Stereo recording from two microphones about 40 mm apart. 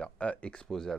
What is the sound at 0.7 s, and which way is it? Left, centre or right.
Speech, centre.